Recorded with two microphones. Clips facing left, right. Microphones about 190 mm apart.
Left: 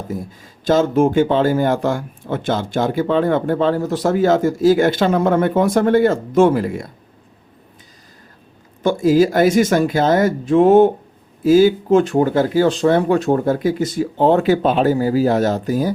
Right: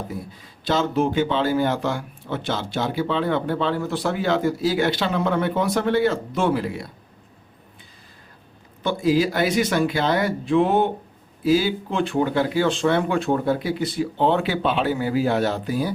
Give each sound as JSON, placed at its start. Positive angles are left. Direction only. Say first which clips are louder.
{"t": 0.1, "sound": "speech", "louder": "left 6 dB", "side_deg": 45}
{"t": 8.8, "sound": "speech", "louder": "left 6 dB", "side_deg": 45}